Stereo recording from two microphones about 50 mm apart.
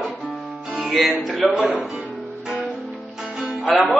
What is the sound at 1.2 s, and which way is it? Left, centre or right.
Speech, centre.